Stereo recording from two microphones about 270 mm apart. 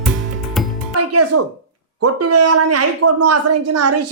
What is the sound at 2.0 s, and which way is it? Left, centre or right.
Speech, right.